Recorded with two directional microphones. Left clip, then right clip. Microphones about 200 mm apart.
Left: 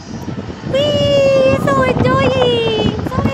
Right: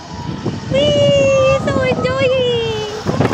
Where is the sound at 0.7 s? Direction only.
20° left (ahead or behind); by 2.7 s 40° left (ahead or behind).